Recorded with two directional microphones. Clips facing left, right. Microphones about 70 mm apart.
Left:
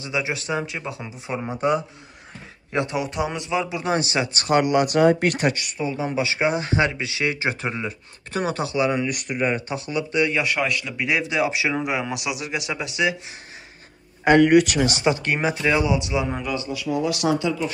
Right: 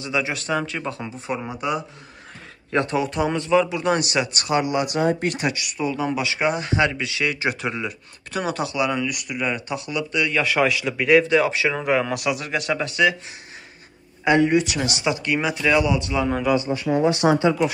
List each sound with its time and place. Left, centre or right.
0.0 s a man's voice: left
1.6 s speech: left
2.7 s speech: centre
4.5 s speech: left
5.4 s speech: left
9.1 s speech: left
9.4 s speech: left
10.4 s a man's voice: centre
11.1 s a man's voice: centre
14.2 s speech: left
14.9 s speech: left; by 16.4 s centre
16.5 s speech: right